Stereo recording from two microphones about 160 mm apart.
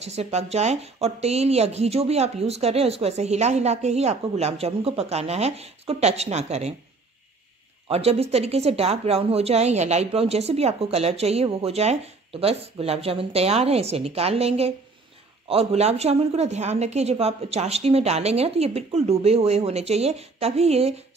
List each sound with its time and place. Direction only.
0.0 s speech: 40° right (ahead or behind)
7.9 s speech: 40° right (ahead or behind)